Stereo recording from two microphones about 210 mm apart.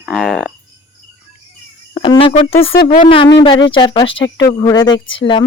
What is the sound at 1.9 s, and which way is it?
Speech, 25° left (ahead or behind).